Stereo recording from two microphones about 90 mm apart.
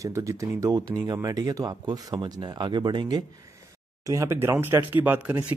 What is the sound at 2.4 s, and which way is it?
Speech, 60° right (ahead or behind).